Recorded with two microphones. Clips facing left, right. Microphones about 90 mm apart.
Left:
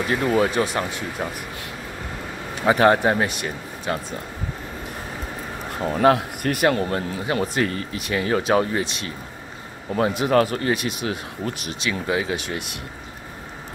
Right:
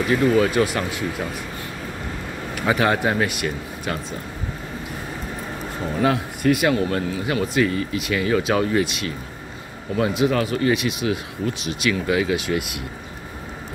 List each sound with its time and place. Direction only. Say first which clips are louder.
0.1 s speech: right 2 dB; 35° left (ahead or behind)
2.5 s speech: left 4 dB; 30° left (ahead or behind)
5.9 s speech: left 4 dB; 50° left (ahead or behind)